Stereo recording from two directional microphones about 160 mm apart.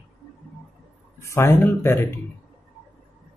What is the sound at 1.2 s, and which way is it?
Speech, 15° left (ahead or behind).